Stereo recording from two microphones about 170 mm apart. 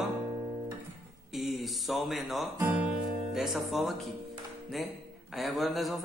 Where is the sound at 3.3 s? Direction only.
Centre (ahead or behind).